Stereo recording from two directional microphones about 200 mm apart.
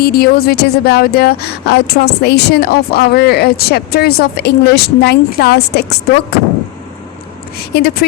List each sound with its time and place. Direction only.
0.0 s speech: 50° left (ahead or behind)
7.7 s speech: 55° left (ahead or behind)